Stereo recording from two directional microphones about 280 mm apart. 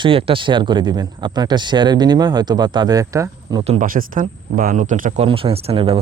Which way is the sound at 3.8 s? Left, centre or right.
Right.